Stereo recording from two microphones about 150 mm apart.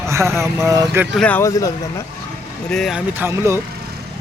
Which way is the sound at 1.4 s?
20° left (ahead or behind).